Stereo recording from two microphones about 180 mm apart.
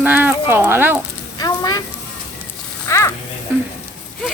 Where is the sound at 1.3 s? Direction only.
20° left (ahead or behind).